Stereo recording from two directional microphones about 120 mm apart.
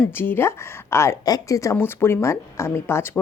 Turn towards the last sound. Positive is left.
turn(degrees=20)  # may be behind; listen again after turning